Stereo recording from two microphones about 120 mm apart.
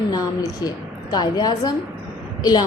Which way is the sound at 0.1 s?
35° left (ahead or behind).